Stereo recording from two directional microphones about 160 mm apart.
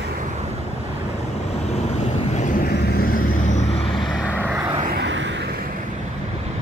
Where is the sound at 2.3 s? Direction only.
50° left (ahead or behind).